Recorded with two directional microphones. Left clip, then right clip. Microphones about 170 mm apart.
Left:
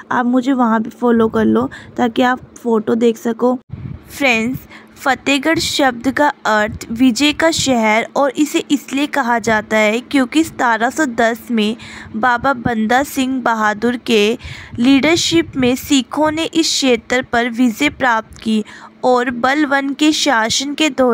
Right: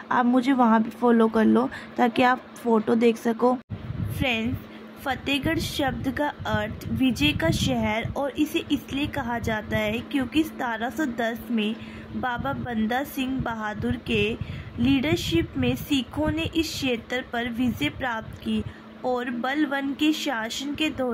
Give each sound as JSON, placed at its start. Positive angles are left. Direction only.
{"t": 0.1, "sound": "speech", "side_deg": 35}
{"t": 4.2, "sound": "a woman's voice", "side_deg": 50}